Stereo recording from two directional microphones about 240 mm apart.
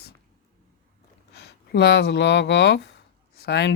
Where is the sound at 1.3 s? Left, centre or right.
Left.